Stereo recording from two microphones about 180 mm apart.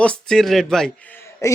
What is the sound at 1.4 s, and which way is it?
Speech, 20° left (ahead or behind).